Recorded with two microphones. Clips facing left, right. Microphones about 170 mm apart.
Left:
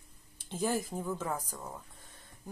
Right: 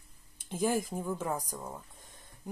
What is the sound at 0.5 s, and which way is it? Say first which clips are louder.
Speech: right 2 dB; 10° right (ahead or behind).